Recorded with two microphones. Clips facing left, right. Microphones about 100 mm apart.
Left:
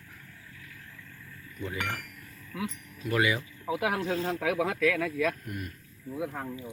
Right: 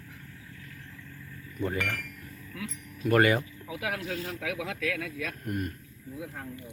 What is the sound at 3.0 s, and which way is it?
Speech, 50° right (ahead or behind).